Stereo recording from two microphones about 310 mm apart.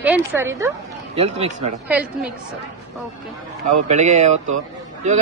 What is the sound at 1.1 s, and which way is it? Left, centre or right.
Speech, centre.